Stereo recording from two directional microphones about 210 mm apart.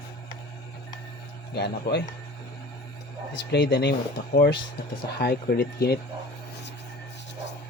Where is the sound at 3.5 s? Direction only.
55° left (ahead or behind).